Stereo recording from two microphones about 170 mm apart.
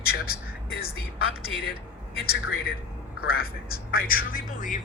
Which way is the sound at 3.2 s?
65° left (ahead or behind).